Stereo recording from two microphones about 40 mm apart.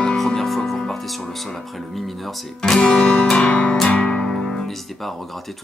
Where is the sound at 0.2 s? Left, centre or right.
Centre; by 4.3 s left.